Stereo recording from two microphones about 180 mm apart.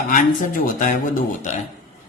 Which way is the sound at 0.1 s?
50° left (ahead or behind).